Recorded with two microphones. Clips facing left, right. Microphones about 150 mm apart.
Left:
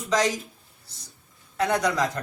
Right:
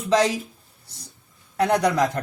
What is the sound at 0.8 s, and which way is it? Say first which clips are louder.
A man's voice: right 6 dB; 60° right (ahead or behind).